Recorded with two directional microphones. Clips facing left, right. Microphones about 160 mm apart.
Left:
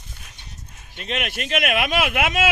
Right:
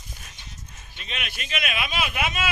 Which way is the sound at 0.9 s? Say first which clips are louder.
Left 9 dB; 65° left (ahead or behind).